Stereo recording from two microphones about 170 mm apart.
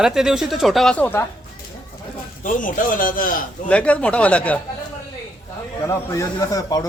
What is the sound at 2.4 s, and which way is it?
Speech, 50° left (ahead or behind).